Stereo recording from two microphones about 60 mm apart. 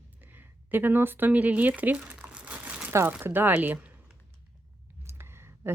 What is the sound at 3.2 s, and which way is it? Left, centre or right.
Speech, right.